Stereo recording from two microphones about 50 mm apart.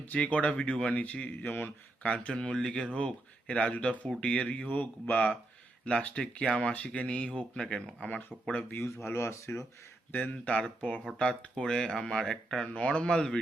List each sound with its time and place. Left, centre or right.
0.1 s speech: left
1.5 s speech: left
2.0 s speech: left
4.7 s speech: left
7.5 s speech: centre
9.0 s speech: left
10.2 s speech: left
11.2 s speech: centre
12.7 s speech: left